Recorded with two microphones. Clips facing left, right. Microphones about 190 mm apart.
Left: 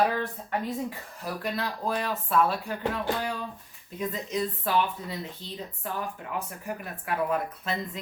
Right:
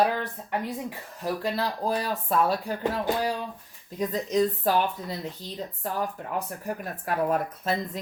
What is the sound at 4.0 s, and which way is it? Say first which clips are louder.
Speech: right 6 dB; 40° right (ahead or behind).